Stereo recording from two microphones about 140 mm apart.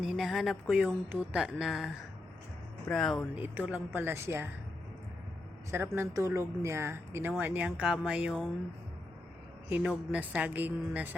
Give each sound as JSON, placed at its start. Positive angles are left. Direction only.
{"t": 0.0, "sound": "speech", "side_deg": -5}
{"t": 1.1, "sound": "speech", "side_deg": -10}
{"t": 2.9, "sound": "speech", "side_deg": 5}
{"t": 3.3, "sound": "speech", "side_deg": -15}
{"t": 5.7, "sound": "speech", "side_deg": -15}
{"t": 9.6, "sound": "a man's voice", "side_deg": -15}